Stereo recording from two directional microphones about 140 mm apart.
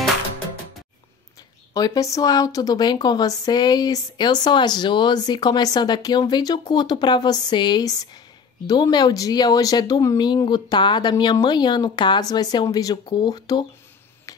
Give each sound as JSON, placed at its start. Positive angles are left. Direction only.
{"t": 1.7, "sound": "speech", "side_deg": 25}